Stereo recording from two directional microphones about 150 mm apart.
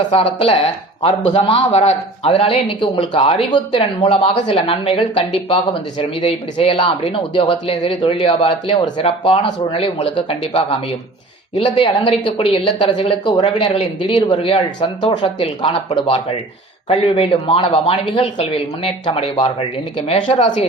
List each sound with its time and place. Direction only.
0.1 s speech: 40° left (ahead or behind)